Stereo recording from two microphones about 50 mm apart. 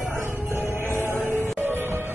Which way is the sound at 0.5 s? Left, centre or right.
Right.